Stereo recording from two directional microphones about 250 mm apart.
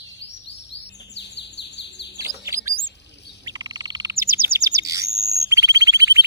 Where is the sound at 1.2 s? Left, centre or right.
Left.